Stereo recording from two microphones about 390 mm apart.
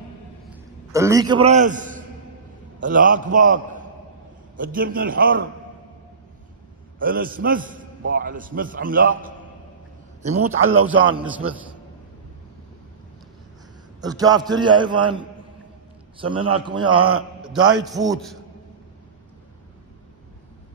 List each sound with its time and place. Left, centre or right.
0.5 s a sound: centre
2.8 s a man's voice: right
7.0 s a man's voice: right
10.4 s speech: right
11.1 s a man's voice: centre
14.0 s a man's voice: centre
17.4 s a man's voice: centre